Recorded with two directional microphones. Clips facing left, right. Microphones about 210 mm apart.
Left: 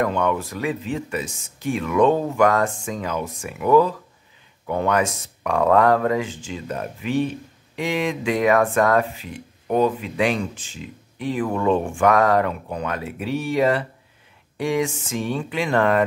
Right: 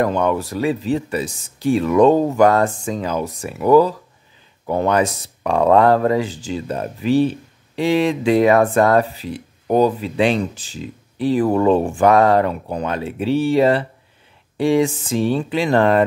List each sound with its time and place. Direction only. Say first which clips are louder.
0.0 s speech: right 3 dB; 35° right (ahead or behind)